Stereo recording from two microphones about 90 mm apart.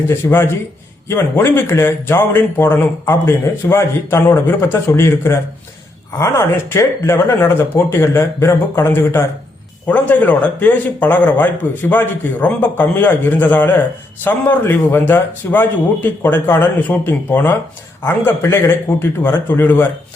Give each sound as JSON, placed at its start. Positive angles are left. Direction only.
{"t": 0.3, "sound": "a man's voice", "side_deg": 25}